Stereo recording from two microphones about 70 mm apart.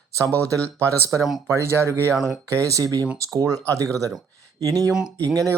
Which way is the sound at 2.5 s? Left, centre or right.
Right.